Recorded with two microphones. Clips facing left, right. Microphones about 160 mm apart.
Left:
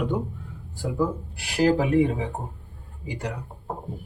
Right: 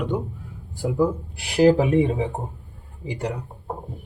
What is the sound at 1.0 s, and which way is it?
Speech, 20° right (ahead or behind).